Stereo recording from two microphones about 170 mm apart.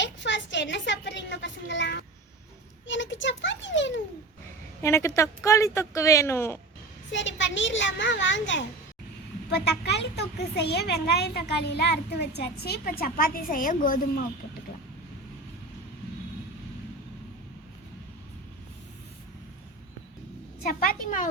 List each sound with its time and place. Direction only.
0.0 s a woman's voice: 90° left
4.8 s speech: 15° left (ahead or behind)
7.1 s a child's voice: 90° left
9.5 s a child's voice: 80° left; by 14.0 s 55° left (ahead or behind)
20.6 s a woman's voice: 60° left (ahead or behind)